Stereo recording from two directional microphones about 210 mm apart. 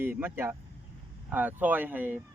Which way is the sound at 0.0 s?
10° right (ahead or behind).